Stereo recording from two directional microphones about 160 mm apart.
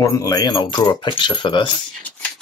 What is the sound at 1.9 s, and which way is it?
Shuffling cards, 10° left (ahead or behind).